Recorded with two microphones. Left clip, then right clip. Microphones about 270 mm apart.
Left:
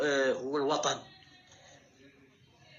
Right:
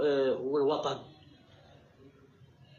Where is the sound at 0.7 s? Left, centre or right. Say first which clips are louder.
Left 1 dB; left.